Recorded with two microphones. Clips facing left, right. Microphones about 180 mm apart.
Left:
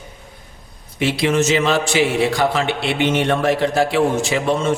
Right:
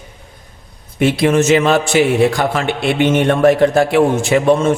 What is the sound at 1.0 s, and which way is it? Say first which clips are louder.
A man's voice: right 5 dB; 50° right (ahead or behind).